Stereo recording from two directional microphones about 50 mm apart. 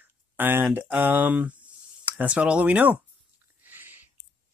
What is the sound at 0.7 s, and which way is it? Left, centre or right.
Speech, right.